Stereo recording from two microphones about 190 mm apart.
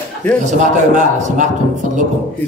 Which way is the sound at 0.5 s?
40° right (ahead or behind).